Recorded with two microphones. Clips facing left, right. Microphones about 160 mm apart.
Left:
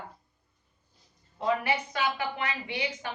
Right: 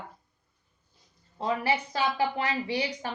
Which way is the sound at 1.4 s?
30° right (ahead or behind).